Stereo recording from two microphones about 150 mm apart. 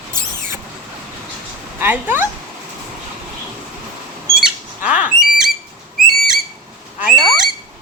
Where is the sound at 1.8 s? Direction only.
15° right (ahead or behind).